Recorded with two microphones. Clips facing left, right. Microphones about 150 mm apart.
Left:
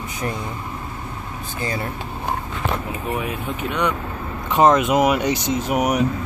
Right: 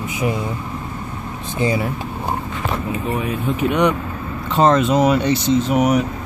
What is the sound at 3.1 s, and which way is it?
Speech, 10° left (ahead or behind).